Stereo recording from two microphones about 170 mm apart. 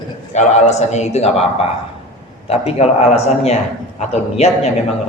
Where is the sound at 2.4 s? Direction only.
35° left (ahead or behind).